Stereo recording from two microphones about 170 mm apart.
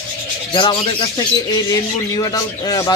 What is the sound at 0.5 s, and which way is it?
Speech, 30° left (ahead or behind).